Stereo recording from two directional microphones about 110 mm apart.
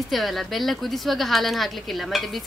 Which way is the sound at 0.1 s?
Centre (ahead or behind).